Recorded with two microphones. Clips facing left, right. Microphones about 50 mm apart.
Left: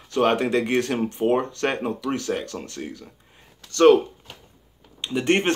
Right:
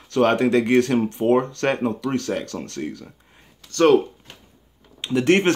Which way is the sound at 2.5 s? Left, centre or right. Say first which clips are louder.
Right 3 dB; centre.